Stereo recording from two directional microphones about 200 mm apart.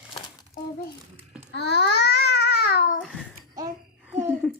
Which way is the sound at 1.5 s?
55° left (ahead or behind).